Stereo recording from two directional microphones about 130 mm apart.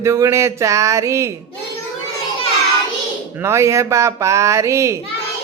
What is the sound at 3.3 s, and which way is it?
Speech, 20° right (ahead or behind).